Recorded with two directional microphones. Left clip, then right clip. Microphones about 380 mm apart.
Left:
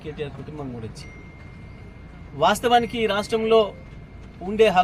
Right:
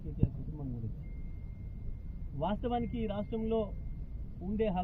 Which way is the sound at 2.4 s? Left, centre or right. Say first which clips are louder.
Left 17 dB; centre.